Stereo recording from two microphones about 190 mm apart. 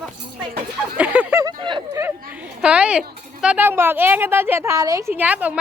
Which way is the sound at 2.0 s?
10° right (ahead or behind).